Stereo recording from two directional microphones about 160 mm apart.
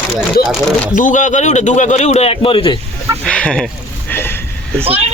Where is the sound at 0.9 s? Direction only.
55° left (ahead or behind); by 2.7 s 35° left (ahead or behind).